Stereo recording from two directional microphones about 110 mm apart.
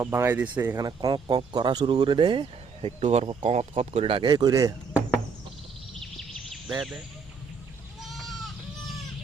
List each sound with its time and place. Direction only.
0.0 s speech: 25° right (ahead or behind)
0.8 s speech: 35° right (ahead or behind); by 2.9 s 50° right (ahead or behind)
3.0 s speech: 75° right (ahead or behind); by 4.4 s 50° right (ahead or behind)
4.4 s speech: 35° right (ahead or behind)
6.0 s a sound: 5° left (ahead or behind)
8.0 s goat: centre (ahead or behind)